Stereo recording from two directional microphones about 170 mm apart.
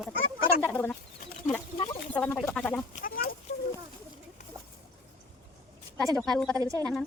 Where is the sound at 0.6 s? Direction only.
10° left (ahead or behind).